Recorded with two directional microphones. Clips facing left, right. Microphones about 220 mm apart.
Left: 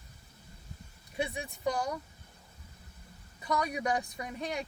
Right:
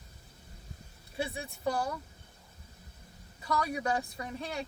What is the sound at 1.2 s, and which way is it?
Speech, 15° left (ahead or behind).